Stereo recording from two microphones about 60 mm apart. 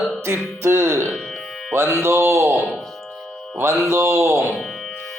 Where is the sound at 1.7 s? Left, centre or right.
Right.